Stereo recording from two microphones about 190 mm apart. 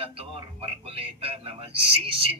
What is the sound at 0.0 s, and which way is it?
Music, 30° right (ahead or behind).